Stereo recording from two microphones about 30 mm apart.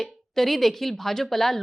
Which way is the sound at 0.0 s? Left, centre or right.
Centre.